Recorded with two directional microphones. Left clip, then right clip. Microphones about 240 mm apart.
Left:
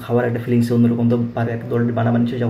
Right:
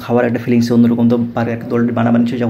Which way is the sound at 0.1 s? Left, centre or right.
Right.